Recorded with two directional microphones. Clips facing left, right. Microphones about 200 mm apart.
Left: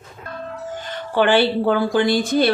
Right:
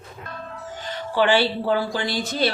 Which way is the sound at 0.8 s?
55° left (ahead or behind).